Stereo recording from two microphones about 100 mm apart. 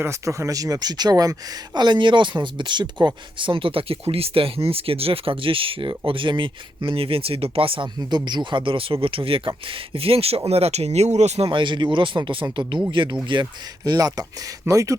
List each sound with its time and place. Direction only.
0.0 s speech: 30° right (ahead or behind); by 7.9 s 65° right (ahead or behind)
7.9 s speech: 45° right (ahead or behind)
13.4 s speech: 40° right (ahead or behind)